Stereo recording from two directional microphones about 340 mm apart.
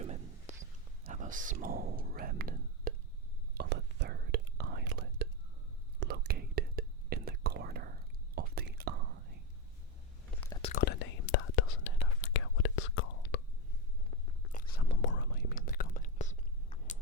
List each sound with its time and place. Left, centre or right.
0.0 s a sound: centre
1.0 s whispering: right
10.4 s whispering: centre; by 13.4 s left
14.1 s biting: centre
14.8 s whispering: left